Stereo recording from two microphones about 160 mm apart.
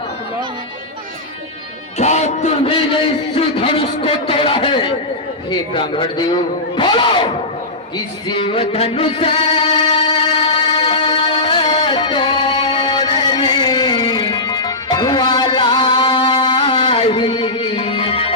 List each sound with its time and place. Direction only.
2.0 s a sound: 45° left (ahead or behind)
3.3 s a man's voice: 35° left (ahead or behind)
7.9 s music: 30° left (ahead or behind)